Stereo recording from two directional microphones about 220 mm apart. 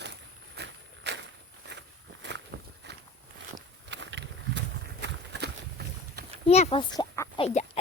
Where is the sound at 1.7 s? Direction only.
50° right (ahead or behind).